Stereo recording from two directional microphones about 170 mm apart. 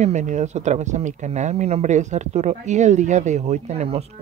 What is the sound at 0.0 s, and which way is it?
Speech, 45° right (ahead or behind).